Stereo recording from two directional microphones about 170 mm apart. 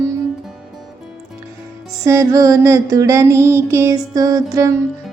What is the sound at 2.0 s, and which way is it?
Music, 20° right (ahead or behind).